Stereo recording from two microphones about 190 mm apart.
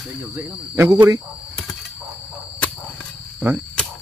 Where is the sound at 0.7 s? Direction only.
15° right (ahead or behind).